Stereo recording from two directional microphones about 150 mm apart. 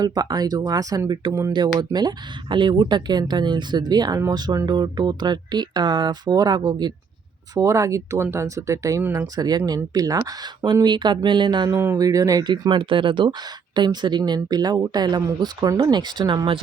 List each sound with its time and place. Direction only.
0.0 s speech: 25° right (ahead or behind)
11.7 s speech: 15° right (ahead or behind)
11.9 s speech: 25° right (ahead or behind)